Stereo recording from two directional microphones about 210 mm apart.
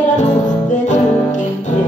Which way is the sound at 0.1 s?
35° left (ahead or behind).